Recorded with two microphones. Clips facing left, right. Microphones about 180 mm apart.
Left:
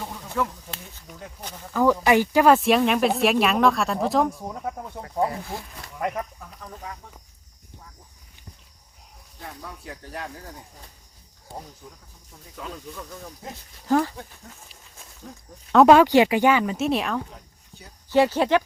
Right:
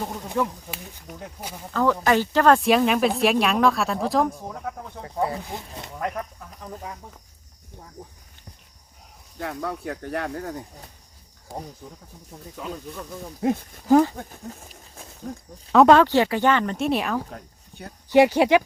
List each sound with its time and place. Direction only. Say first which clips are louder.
0.3 s speech: right 1 dB; 15° right (ahead or behind)
1.7 s speech: left 2 dB; 10° left (ahead or behind)
5.3 s speech: right 1 dB; 25° right (ahead or behind)
6.0 s speech: left 1 dB; 10° left (ahead or behind)
9.4 s speech: right 10 dB; 70° right (ahead or behind)
12.5 s speech: right 2 dB; 10° right (ahead or behind)
13.4 s speech: right 16 dB; 55° right (ahead or behind)
13.8 s speech: right 5 dB; 15° right (ahead or behind)
14.2 s speech: right 5 dB; 45° right (ahead or behind)
15.7 s speech: left 1 dB; 5° left (ahead or behind)
17.3 s cricket: right 7 dB; 60° right (ahead or behind)
18.1 s speech: right 3 dB; 15° right (ahead or behind)